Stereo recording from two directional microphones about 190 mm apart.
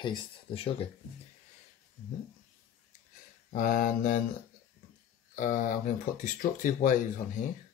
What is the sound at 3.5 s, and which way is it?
Speech, 45° left (ahead or behind).